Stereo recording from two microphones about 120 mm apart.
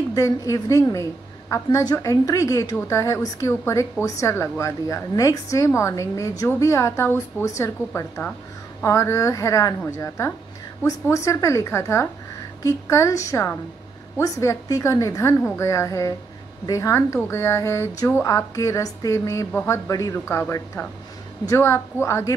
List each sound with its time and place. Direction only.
0.1 s a woman's voice: 30° left (ahead or behind)